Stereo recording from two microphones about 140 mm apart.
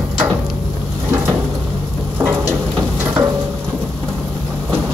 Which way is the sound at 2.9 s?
15° right (ahead or behind).